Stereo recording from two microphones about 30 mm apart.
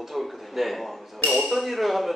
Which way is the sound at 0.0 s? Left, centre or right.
Centre.